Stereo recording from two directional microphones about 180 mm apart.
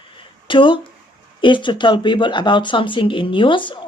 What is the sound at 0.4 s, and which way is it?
Speech, 30° left (ahead or behind).